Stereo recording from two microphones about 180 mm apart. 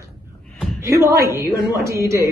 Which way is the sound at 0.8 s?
20° right (ahead or behind).